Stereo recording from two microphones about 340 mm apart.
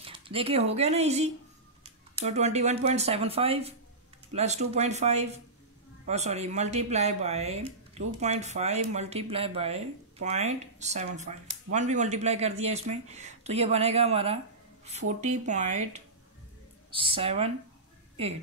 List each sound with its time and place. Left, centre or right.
0.0 s speech: centre